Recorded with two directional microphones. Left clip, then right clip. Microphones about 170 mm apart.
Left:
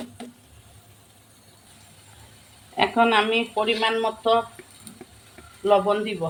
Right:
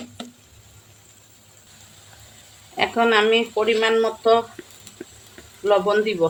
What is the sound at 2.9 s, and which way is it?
Speech, 20° right (ahead or behind).